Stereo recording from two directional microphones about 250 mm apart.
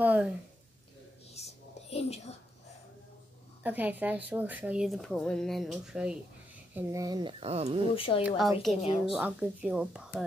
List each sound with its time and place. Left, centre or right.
0.0 s a sound: centre
1.4 s a sound: left
1.9 s whispering: left
3.6 s speech: centre; by 7.9 s right
7.9 s a woman's voice: left
9.1 s speech: centre